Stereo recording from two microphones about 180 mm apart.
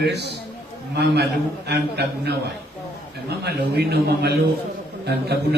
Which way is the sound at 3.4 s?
65° right (ahead or behind).